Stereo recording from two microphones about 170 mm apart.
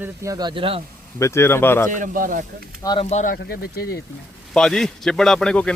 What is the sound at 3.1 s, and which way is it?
Speech, 45° left (ahead or behind).